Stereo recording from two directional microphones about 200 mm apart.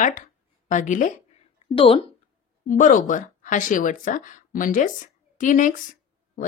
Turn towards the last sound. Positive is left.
turn(degrees=40)  # may be behind; listen again after turning